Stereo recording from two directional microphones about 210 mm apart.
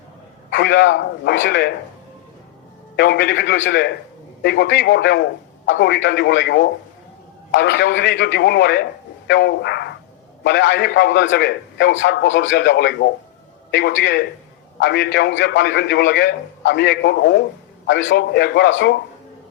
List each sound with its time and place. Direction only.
0.5 s a man's voice: 55° left (ahead or behind)
2.9 s a man's voice: 50° left (ahead or behind)